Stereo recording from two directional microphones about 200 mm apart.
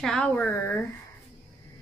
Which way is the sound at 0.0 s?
5° left (ahead or behind).